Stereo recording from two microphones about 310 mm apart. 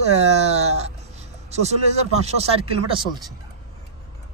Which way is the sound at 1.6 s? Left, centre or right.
Right.